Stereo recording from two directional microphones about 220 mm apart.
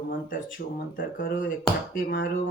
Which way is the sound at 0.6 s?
45° left (ahead or behind).